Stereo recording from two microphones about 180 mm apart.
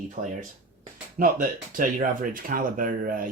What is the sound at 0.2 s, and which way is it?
Speech, 45° right (ahead or behind).